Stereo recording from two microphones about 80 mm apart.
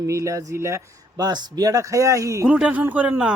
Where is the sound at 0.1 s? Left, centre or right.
Right.